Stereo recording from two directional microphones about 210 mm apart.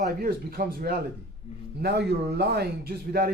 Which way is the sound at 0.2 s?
45° right (ahead or behind).